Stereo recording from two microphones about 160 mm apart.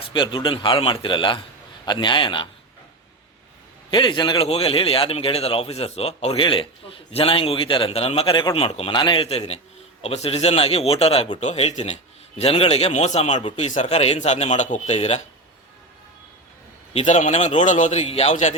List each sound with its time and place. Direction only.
0.0 s a man's voice: 30° left (ahead or behind)
3.9 s a man's voice: 30° left (ahead or behind)
16.9 s a man's voice: 50° left (ahead or behind)